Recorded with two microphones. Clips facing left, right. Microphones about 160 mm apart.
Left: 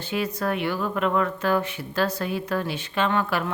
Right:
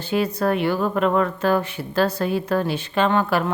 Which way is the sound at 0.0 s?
35° right (ahead or behind).